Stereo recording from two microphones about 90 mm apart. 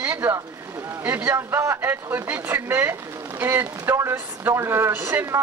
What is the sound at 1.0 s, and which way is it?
Speech, 20° right (ahead or behind).